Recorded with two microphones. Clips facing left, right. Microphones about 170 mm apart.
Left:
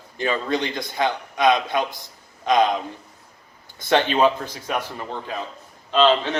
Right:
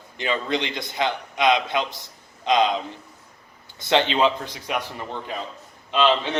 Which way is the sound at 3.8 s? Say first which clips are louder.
Left 2 dB; 20° right (ahead or behind).